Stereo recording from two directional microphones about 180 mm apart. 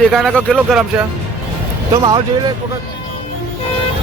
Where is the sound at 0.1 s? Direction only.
Centre (ahead or behind).